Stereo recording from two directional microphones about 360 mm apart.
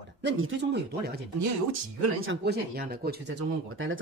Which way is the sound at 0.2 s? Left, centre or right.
Right.